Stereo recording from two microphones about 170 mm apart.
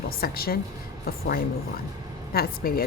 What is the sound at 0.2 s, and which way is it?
Speech, 60° left (ahead or behind).